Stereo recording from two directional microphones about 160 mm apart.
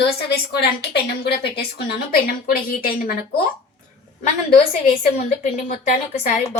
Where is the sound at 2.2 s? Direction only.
60° left (ahead or behind).